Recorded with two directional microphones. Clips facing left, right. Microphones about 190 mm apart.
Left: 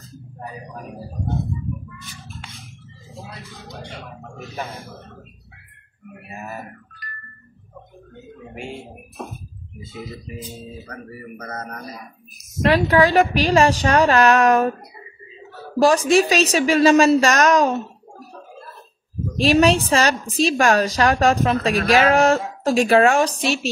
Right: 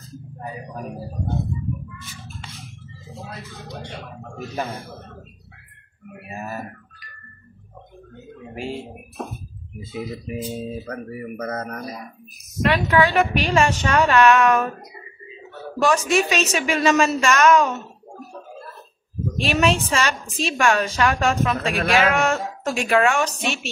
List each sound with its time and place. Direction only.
7.0 s music: centre (ahead or behind)
12.6 s a woman's voice: 35° left (ahead or behind)
15.8 s a woman's voice: 35° left (ahead or behind)
19.3 s a woman's voice: 35° left (ahead or behind)